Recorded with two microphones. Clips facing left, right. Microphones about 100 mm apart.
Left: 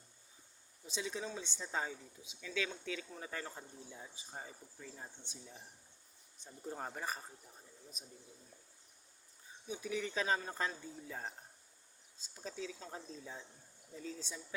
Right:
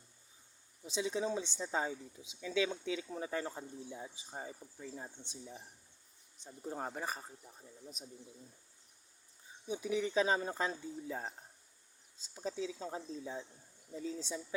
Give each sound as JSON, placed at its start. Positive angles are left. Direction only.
{"t": 0.9, "sound": "speech", "side_deg": -20}
{"t": 6.7, "sound": "speech", "side_deg": -20}
{"t": 9.6, "sound": "speech", "side_deg": -25}
{"t": 12.3, "sound": "speech", "side_deg": -20}